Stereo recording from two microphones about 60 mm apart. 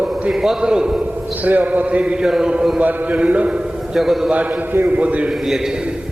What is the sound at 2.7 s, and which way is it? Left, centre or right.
Speech, right.